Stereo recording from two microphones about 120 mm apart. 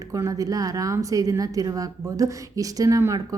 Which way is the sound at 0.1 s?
30° right (ahead or behind).